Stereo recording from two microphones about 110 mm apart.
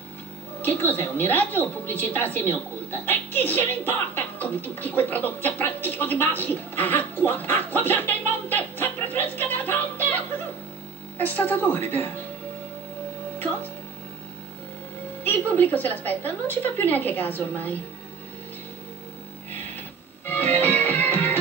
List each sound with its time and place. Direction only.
0.6 s a woman's voice: 15° left (ahead or behind)
15.2 s a woman's voice: 15° left (ahead or behind)
20.2 s music: 15° left (ahead or behind)